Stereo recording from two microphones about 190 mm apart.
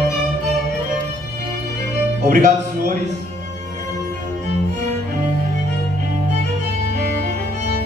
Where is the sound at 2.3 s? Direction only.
45° right (ahead or behind).